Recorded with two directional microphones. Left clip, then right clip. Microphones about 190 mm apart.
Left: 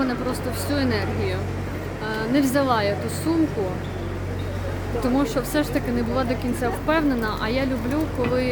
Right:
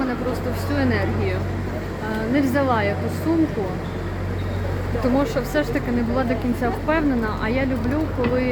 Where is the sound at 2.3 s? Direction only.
10° left (ahead or behind).